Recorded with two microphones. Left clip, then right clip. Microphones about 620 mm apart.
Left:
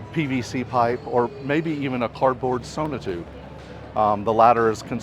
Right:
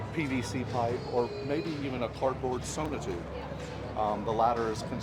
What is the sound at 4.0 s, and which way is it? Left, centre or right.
Speech, left.